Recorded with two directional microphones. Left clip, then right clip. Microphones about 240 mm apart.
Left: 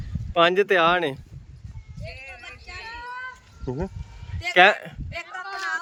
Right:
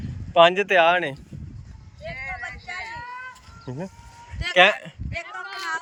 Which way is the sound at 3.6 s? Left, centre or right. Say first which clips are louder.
Left 4 dB; centre.